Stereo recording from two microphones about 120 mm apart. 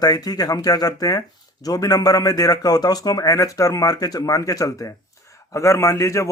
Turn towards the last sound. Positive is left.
turn(degrees=25)  # may be behind; listen again after turning